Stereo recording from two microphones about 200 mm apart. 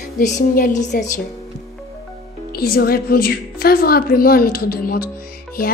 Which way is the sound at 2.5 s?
50° left (ahead or behind).